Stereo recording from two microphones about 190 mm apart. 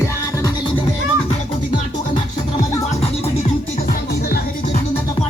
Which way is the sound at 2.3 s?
40° left (ahead or behind).